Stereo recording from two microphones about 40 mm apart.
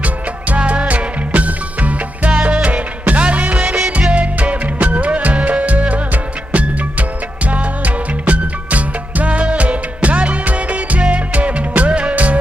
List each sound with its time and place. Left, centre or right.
0.6 s music: right